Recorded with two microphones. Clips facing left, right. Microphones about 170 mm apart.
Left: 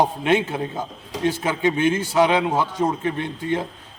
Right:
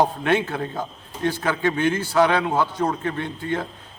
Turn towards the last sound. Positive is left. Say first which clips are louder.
# left 2 dB
turn(degrees=20)  # may be behind; listen again after turning